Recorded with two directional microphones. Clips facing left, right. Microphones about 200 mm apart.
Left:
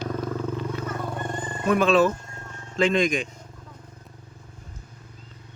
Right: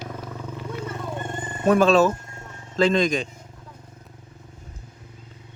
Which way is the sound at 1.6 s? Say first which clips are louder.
Right 3 dB; 40° right (ahead or behind).